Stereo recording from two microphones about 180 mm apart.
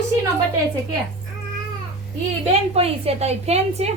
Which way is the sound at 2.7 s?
35° right (ahead or behind).